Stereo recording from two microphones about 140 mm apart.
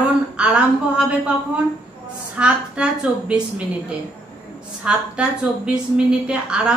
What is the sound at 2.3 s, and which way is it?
A woman's voice, 10° right (ahead or behind).